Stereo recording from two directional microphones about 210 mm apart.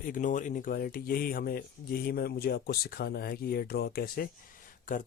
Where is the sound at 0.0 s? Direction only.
40° left (ahead or behind).